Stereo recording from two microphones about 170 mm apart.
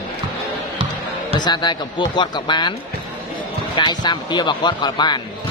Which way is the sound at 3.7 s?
25° left (ahead or behind).